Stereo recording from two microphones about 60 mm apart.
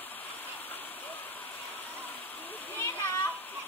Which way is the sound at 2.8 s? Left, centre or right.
Left.